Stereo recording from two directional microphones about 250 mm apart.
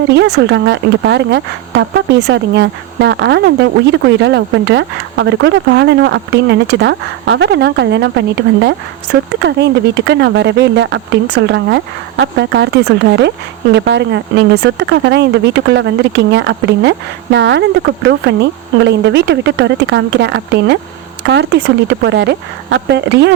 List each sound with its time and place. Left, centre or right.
0.1 s speech: right
9.3 s speech: right